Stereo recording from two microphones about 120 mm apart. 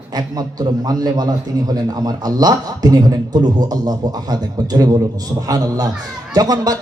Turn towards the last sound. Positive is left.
turn(degrees=-35)  # may be behind; listen again after turning